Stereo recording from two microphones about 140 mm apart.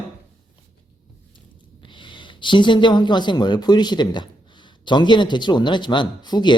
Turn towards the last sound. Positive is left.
turn(degrees=30)  # may be behind; listen again after turning